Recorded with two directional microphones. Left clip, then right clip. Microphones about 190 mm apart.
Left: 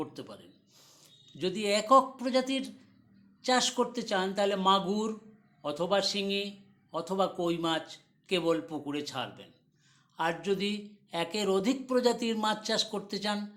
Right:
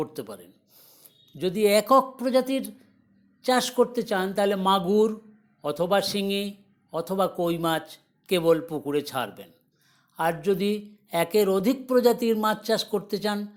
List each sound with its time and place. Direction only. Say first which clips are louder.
0.0 s speech: right 8 dB; 35° right (ahead or behind)